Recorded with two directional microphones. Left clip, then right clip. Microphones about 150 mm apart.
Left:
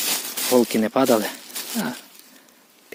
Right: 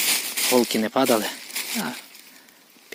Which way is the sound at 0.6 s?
35° left (ahead or behind).